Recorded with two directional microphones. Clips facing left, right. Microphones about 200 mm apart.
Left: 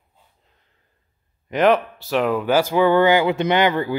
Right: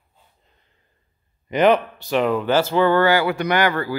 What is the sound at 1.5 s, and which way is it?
Speech, centre (ahead or behind).